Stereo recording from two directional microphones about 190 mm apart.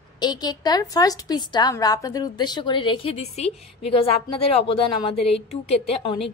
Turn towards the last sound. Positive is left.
turn(degrees=30)  # may be behind; listen again after turning